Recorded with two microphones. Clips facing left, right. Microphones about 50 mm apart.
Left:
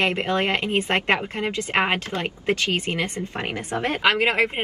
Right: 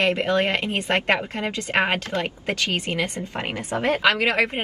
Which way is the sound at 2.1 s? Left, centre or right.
Left.